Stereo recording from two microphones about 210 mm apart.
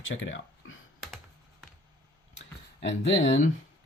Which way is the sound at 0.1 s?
65° left (ahead or behind).